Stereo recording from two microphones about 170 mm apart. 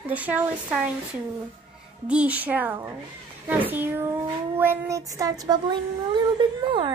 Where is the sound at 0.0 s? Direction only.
10° right (ahead or behind).